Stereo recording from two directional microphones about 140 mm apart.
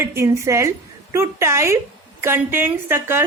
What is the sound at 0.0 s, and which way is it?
Speech, 20° right (ahead or behind).